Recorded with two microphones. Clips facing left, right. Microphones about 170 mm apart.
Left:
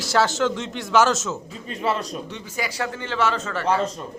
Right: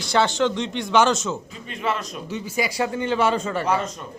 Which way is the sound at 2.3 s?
15° right (ahead or behind).